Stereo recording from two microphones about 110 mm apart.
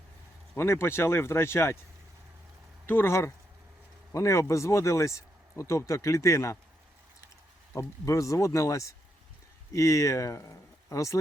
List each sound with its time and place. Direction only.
0.5 s speech: 25° left (ahead or behind)
2.8 s speech: 20° left (ahead or behind)
7.7 s speech: 30° left (ahead or behind)